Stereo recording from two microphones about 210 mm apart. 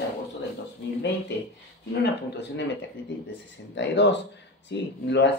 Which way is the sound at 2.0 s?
50° left (ahead or behind).